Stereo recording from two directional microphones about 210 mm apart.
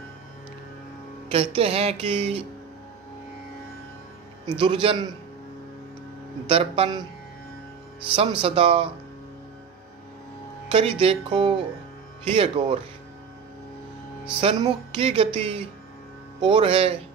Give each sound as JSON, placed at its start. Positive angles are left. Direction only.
{"t": 1.3, "sound": "speech", "side_deg": -25}
{"t": 4.5, "sound": "speech", "side_deg": -20}
{"t": 6.5, "sound": "speech", "side_deg": -25}
{"t": 8.1, "sound": "speech", "side_deg": -25}
{"t": 10.7, "sound": "speech", "side_deg": -25}
{"t": 14.6, "sound": "speech", "side_deg": -25}